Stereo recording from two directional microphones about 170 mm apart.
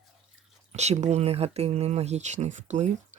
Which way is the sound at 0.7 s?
40° right (ahead or behind).